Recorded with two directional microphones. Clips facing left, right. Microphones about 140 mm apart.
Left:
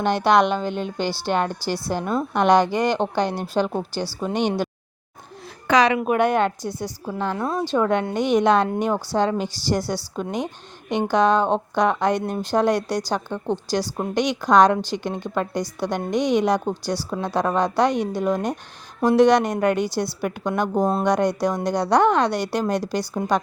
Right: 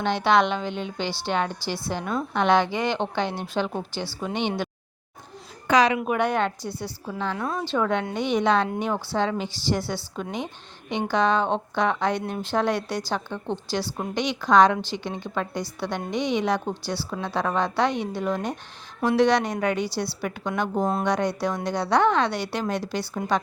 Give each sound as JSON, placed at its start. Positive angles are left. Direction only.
{"t": 0.0, "sound": "a woman's voice", "side_deg": 45}
{"t": 5.6, "sound": "a woman's voice", "side_deg": 75}
{"t": 6.0, "sound": "a woman's voice", "side_deg": 50}
{"t": 7.3, "sound": "a woman's voice", "side_deg": 35}